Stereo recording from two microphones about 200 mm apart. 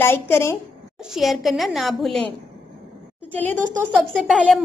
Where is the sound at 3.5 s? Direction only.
40° right (ahead or behind).